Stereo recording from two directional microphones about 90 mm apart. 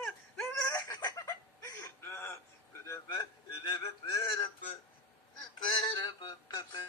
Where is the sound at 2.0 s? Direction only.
25° left (ahead or behind).